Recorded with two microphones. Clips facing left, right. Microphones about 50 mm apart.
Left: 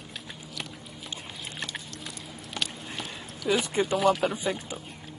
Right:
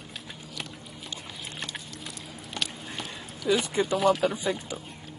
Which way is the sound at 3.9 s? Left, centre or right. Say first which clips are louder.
Right 1 dB; centre.